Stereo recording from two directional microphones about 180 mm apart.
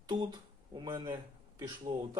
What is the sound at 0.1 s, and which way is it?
Speech, 25° right (ahead or behind).